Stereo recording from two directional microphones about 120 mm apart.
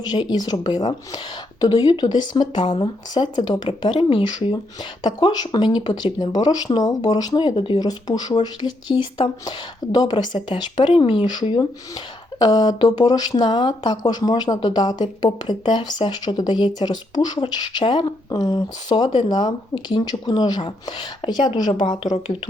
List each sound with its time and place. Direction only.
0.0 s speech: 40° left (ahead or behind)
12.4 s speech: 35° left (ahead or behind)